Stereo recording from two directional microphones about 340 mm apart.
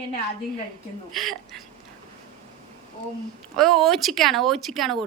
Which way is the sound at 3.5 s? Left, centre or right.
Centre.